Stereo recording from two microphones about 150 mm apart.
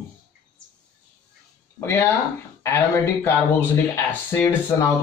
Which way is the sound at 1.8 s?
15° left (ahead or behind).